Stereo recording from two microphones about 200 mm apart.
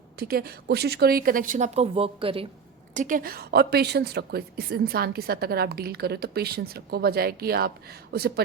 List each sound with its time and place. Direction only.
0.2 s a woman's voice: 50° right (ahead or behind); by 2.5 s 25° right (ahead or behind)
2.9 s a woman's voice: 40° right (ahead or behind)